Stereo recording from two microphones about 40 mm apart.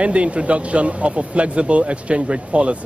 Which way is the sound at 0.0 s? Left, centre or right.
Right.